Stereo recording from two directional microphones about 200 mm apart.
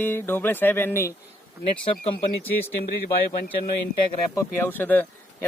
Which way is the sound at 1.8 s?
30° left (ahead or behind).